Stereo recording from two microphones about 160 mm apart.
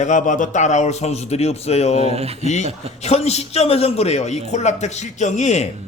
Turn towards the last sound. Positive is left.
turn(degrees=45)  # may be behind; listen again after turning